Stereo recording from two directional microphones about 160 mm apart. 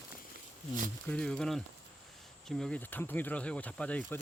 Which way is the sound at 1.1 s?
5° left (ahead or behind).